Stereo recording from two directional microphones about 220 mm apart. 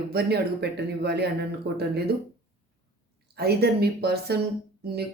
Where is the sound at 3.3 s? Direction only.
45° right (ahead or behind).